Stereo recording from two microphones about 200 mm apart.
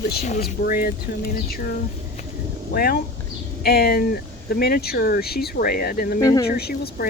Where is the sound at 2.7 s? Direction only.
50° left (ahead or behind).